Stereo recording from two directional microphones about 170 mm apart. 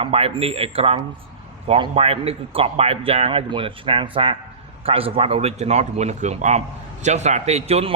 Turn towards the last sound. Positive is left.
turn(degrees=-40)  # may be behind; listen again after turning